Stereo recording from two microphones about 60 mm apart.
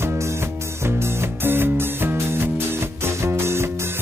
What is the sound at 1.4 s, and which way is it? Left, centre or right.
Music, right.